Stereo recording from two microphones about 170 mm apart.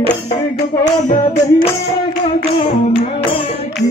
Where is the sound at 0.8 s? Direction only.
50° left (ahead or behind).